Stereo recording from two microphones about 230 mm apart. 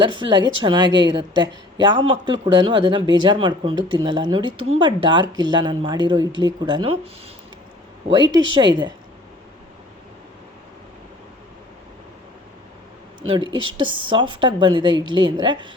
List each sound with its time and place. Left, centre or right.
0.0 s speech: right
8.1 s speech: centre
13.7 s speech: right